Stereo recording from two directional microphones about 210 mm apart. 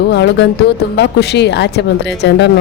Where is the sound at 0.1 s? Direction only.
55° left (ahead or behind).